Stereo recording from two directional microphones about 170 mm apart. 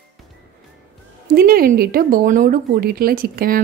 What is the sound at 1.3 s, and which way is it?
Speech, 60° right (ahead or behind).